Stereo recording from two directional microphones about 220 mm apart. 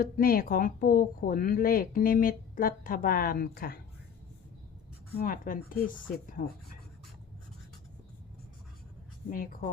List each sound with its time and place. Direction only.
0.0 s speech: 40° left (ahead or behind)
5.1 s speech: 40° left (ahead or behind)
9.3 s speech: 40° left (ahead or behind)